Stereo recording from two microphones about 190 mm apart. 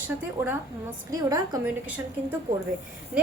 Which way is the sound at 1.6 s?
10° right (ahead or behind).